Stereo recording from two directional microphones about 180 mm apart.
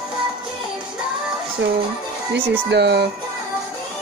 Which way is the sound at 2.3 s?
70° right (ahead or behind).